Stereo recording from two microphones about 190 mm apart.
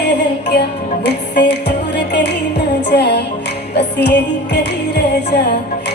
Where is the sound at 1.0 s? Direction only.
65° left (ahead or behind).